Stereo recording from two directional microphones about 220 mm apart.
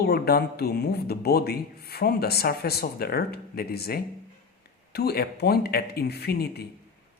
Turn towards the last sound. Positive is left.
turn(degrees=45)  # may be behind; listen again after turning